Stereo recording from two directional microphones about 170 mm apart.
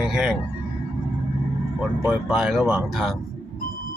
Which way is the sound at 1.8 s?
5° right (ahead or behind).